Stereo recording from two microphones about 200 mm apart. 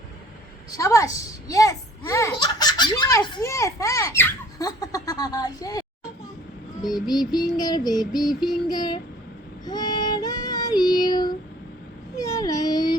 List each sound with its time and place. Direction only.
0.7 s a child's voice: 15° left (ahead or behind)
7.1 s child singing: 20° left (ahead or behind)
12.1 s a sound: 15° left (ahead or behind)